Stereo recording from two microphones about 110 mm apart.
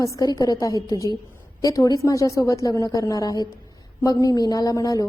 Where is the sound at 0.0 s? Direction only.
35° left (ahead or behind).